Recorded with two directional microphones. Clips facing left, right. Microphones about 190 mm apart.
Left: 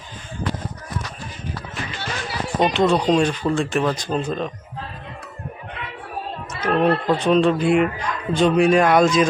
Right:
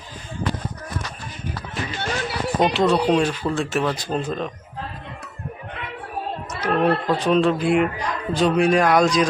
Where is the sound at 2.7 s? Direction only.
5° right (ahead or behind).